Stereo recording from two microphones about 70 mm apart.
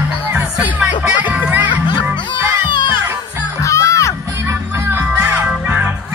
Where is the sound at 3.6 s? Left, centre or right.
Left.